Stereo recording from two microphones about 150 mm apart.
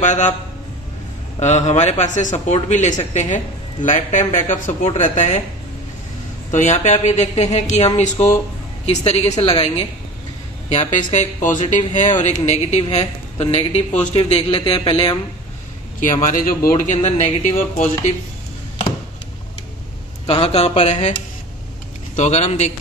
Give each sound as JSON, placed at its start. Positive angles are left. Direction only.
{"t": 0.0, "sound": "speech", "side_deg": 55}
{"t": 1.4, "sound": "a man's voice", "side_deg": 50}
{"t": 6.5, "sound": "a man's voice", "side_deg": 55}
{"t": 16.0, "sound": "speech", "side_deg": 60}
{"t": 20.2, "sound": "a man's voice", "side_deg": 45}
{"t": 22.1, "sound": "a man's voice", "side_deg": 50}